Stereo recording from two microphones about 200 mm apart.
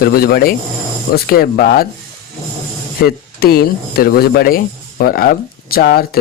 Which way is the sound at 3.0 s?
50° left (ahead or behind).